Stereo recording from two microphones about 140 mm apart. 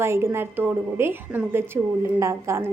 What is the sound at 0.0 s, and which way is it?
A woman's voice, 20° right (ahead or behind).